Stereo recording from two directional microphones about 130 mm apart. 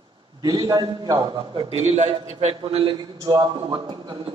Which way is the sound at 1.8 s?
55° right (ahead or behind).